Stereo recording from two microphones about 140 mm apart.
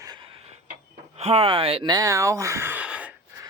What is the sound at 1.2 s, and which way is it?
Speech, 50° right (ahead or behind).